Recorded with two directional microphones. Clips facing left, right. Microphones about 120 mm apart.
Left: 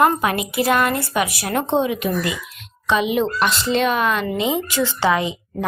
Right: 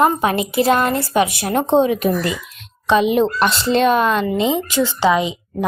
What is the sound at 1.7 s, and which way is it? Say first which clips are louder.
A child's voice: right 6 dB; 35° right (ahead or behind).